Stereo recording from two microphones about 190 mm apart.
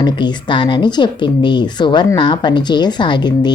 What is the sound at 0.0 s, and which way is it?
Speech, 25° left (ahead or behind).